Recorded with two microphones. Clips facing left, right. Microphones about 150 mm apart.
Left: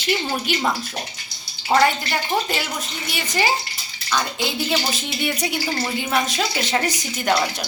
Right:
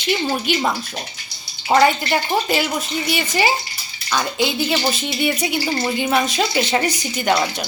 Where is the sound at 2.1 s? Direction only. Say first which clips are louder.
Right 4 dB; 5° right (ahead or behind).